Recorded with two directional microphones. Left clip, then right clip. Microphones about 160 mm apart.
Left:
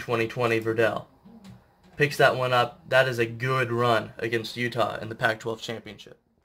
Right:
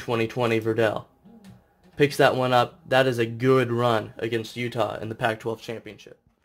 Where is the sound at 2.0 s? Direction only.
50° right (ahead or behind).